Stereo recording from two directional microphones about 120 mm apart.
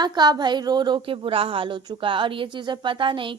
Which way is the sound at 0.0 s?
35° right (ahead or behind).